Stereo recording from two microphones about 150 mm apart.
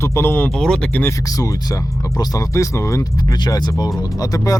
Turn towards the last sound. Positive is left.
turn(degrees=25)  # may be behind; listen again after turning